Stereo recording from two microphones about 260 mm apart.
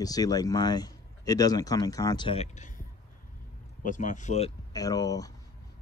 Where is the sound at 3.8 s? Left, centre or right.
Left; by 5.3 s centre.